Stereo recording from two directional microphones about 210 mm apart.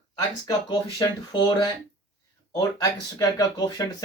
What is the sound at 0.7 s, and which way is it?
Speech, 20° left (ahead or behind).